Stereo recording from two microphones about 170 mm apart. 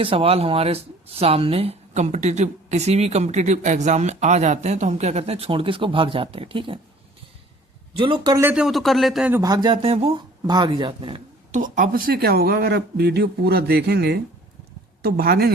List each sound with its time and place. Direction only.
0.0 s speech: 35° right (ahead or behind)
7.9 s speech: 30° right (ahead or behind)
8.4 s speech: 5° right (ahead or behind)
9.3 s speech: 20° right (ahead or behind)
11.5 s speech: 50° right (ahead or behind); by 14.2 s 75° right (ahead or behind)
15.0 s speech: 65° right (ahead or behind)